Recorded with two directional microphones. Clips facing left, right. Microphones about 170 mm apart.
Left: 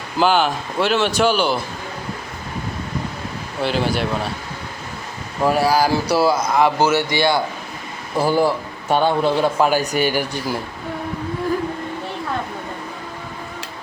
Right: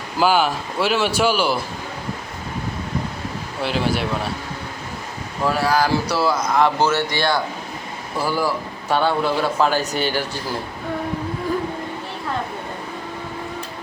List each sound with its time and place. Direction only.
0.2 s speech: 5° right (ahead or behind)
3.6 s speech: centre (ahead or behind)
5.4 s a man's voice: 15° left (ahead or behind)
6.8 s a man's voice: 20° left (ahead or behind)